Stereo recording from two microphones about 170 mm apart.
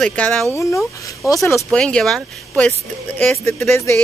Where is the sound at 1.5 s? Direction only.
5° left (ahead or behind).